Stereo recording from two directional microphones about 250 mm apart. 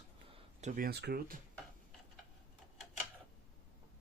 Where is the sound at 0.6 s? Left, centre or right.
Right.